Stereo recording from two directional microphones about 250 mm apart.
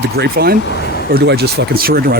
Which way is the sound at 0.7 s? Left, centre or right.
Left.